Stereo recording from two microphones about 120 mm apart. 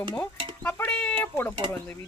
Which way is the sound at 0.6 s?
15° left (ahead or behind).